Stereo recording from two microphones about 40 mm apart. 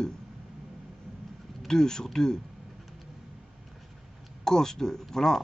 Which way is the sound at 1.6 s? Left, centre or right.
Centre.